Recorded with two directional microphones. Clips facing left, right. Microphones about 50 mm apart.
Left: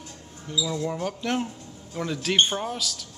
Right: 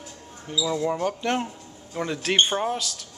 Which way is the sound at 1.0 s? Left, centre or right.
Centre.